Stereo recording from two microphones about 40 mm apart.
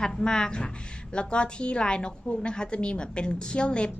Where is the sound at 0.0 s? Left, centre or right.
Centre.